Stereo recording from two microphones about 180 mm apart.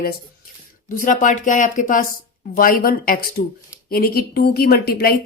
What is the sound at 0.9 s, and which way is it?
Speech, 50° left (ahead or behind).